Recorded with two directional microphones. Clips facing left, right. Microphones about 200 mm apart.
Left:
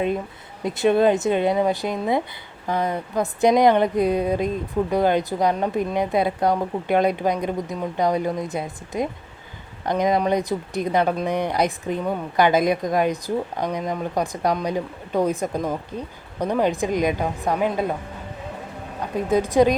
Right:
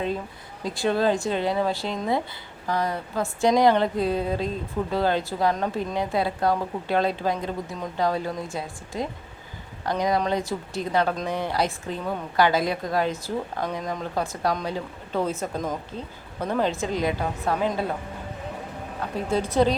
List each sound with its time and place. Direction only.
0.6 s speech: 20° left (ahead or behind)
18.9 s speech: 15° left (ahead or behind)